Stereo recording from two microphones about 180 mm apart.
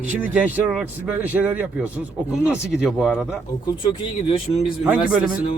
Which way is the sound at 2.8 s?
Centre (ahead or behind).